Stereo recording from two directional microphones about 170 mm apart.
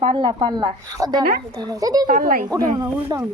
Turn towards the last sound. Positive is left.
turn(degrees=-20)  # may be behind; listen again after turning